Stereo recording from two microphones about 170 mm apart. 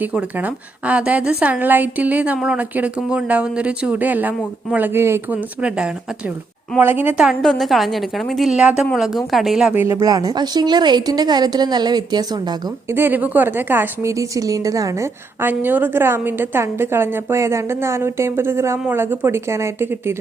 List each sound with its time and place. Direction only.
0.0 s a woman's voice: 10° right (ahead or behind)
9.7 s speech: 15° right (ahead or behind)